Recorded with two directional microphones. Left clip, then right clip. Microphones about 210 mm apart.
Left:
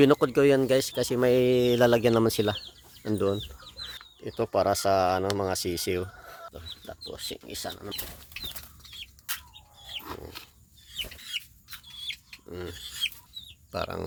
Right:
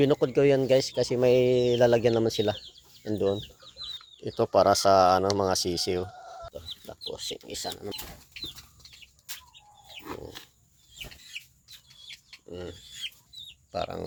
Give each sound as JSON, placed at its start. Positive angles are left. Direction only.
{"t": 0.0, "sound": "speech", "side_deg": 25}
{"t": 3.8, "sound": "speech", "side_deg": 0}
{"t": 6.2, "sound": "chicken", "side_deg": 25}
{"t": 7.1, "sound": "speech", "side_deg": 15}
{"t": 12.5, "sound": "rodents", "side_deg": 20}
{"t": 13.7, "sound": "speech", "side_deg": 25}